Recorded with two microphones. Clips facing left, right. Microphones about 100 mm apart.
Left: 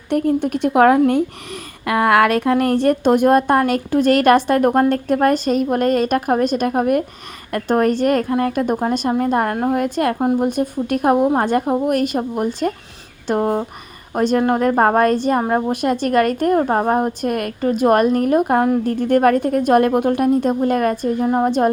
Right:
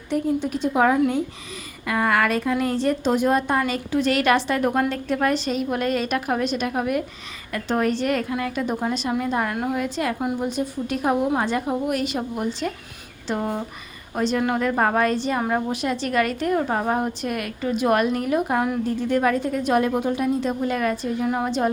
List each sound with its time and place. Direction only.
0.1 s speech: 60° left (ahead or behind)
1.9 s a woman's voice: 70° left (ahead or behind); by 21.2 s 45° left (ahead or behind)
21.2 s a woman's voice: 35° left (ahead or behind)